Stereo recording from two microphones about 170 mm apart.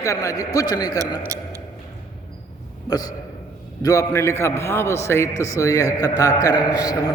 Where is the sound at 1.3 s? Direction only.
20° right (ahead or behind).